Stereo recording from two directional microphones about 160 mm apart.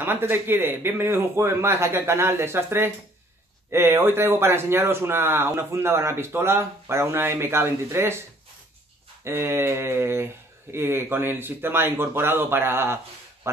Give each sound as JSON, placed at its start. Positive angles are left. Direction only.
{"t": 0.0, "sound": "speech", "side_deg": -15}
{"t": 9.2, "sound": "speech", "side_deg": -15}